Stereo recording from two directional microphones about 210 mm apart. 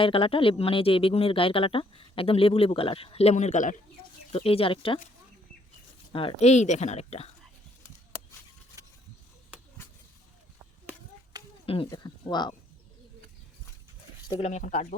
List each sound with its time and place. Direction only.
0.0 s speech: 25° left (ahead or behind)
6.1 s speech: 30° left (ahead or behind)
11.6 s speech: 25° left (ahead or behind)
14.3 s speech: 30° left (ahead or behind)